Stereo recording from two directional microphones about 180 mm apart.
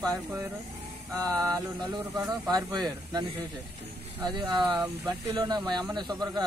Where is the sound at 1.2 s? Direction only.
20° right (ahead or behind).